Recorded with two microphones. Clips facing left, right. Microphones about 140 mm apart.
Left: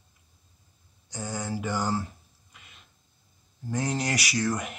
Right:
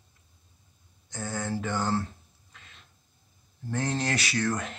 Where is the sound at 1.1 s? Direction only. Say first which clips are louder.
Right 1 dB; 10° left (ahead or behind).